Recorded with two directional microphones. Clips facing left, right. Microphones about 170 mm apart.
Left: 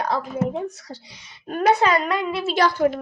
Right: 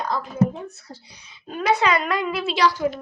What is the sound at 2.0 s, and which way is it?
Speech, 30° left (ahead or behind).